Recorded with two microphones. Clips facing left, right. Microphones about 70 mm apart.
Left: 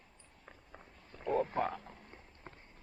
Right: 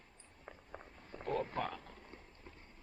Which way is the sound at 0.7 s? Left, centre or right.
Centre.